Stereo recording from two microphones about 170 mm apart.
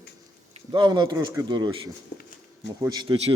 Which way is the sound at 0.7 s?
25° right (ahead or behind).